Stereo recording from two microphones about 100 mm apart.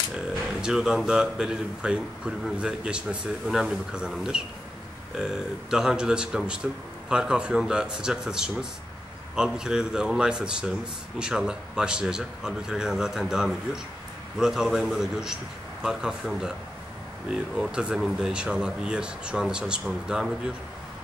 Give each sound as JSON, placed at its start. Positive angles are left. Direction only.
{"t": 0.6, "sound": "a man's voice", "side_deg": -5}